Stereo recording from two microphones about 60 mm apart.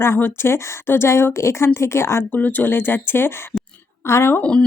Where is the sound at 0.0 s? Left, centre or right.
Left.